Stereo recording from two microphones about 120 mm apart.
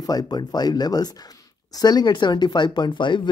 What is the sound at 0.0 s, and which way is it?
Speech, 30° left (ahead or behind).